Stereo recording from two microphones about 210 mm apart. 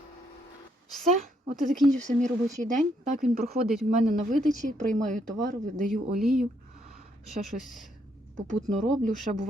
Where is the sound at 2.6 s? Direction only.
40° right (ahead or behind).